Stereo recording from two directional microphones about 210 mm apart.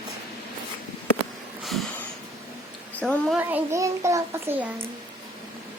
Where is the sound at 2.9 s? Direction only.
5° left (ahead or behind).